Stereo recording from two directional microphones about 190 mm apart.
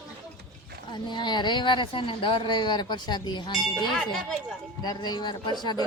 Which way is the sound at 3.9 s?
5° left (ahead or behind).